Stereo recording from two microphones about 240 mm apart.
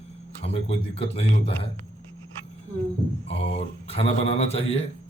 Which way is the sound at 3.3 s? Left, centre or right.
Left.